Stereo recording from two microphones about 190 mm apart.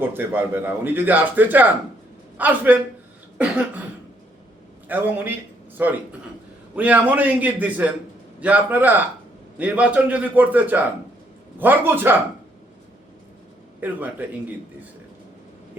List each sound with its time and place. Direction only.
0.0 s a man's voice: 10° right (ahead or behind)
4.9 s a man's voice: 10° right (ahead or behind)
13.8 s a man's voice: 10° right (ahead or behind)